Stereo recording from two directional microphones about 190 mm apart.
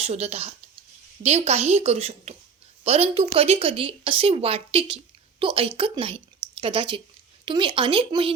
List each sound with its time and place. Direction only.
0.0 s a woman's voice: 35° right (ahead or behind)